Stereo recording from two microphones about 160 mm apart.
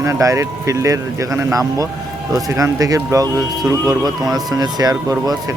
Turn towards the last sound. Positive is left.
turn(degrees=-25)  # may be behind; listen again after turning